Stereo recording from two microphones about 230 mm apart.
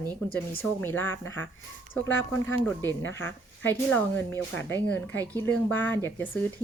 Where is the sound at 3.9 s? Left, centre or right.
Centre.